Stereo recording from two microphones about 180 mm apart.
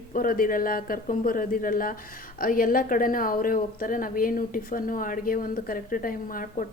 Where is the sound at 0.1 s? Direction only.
50° left (ahead or behind).